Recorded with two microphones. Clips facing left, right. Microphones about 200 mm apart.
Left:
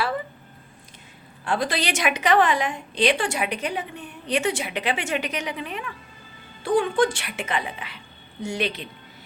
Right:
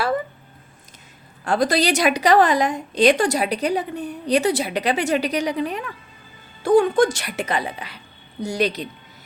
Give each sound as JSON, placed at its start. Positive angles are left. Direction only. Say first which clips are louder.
{"t": 1.5, "sound": "a woman's voice", "louder": "right 6 dB", "side_deg": -40}